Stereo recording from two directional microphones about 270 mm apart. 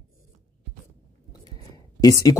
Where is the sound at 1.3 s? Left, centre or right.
Centre.